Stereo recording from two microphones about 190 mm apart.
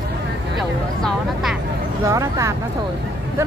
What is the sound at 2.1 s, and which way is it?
Speech, 15° right (ahead or behind).